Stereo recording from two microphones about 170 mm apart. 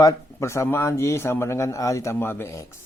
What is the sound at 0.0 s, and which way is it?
Speech, 20° left (ahead or behind).